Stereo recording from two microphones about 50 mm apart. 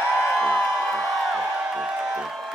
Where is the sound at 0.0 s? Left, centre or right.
Centre.